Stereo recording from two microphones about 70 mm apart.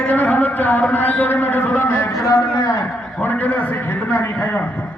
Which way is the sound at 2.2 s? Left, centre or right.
Left.